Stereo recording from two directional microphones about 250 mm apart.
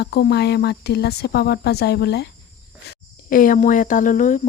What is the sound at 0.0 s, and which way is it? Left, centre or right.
A woman's voice, left.